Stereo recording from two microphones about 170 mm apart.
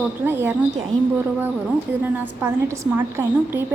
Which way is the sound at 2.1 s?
15° right (ahead or behind).